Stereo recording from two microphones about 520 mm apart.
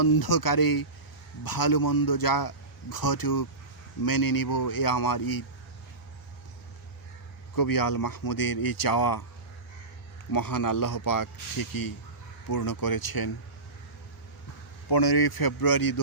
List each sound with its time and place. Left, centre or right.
0.0 s a man's voice: left
7.5 s speech: left
10.3 s speech: left
14.8 s a man's voice: left